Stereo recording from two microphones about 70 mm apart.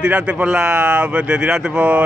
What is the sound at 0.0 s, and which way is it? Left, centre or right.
Speech, centre.